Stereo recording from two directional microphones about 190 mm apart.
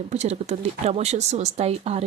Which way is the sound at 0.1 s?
35° right (ahead or behind).